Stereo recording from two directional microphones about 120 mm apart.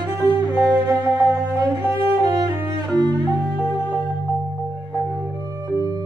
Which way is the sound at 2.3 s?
40° right (ahead or behind).